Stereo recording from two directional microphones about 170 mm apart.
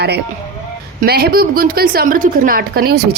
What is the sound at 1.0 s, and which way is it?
A woman's voice, 65° right (ahead or behind).